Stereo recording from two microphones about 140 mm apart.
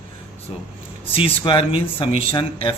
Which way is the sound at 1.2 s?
35° left (ahead or behind).